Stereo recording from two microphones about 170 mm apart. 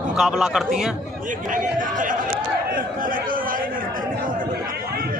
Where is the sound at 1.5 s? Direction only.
50° right (ahead or behind).